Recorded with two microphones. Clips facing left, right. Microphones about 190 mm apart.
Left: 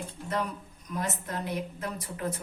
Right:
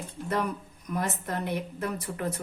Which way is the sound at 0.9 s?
60° right (ahead or behind).